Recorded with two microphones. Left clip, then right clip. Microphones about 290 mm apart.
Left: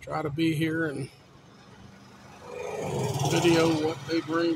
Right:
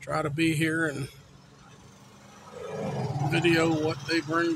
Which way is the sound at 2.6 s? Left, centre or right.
Left.